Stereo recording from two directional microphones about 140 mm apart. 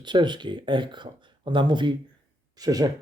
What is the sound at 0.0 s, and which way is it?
Speech, 35° right (ahead or behind).